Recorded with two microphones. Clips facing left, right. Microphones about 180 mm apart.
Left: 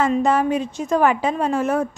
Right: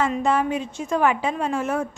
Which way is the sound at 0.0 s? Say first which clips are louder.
Left 3 dB; 40° left (ahead or behind).